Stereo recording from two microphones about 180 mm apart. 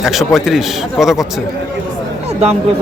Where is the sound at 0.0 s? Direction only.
Centre (ahead or behind).